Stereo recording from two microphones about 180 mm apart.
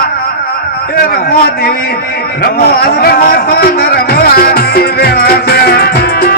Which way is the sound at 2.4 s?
60° left (ahead or behind).